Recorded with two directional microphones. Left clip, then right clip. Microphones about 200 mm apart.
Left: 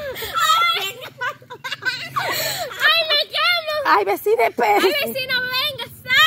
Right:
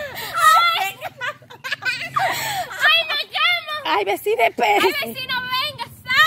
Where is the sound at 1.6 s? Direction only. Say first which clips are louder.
Right 1 dB; 55° right (ahead or behind).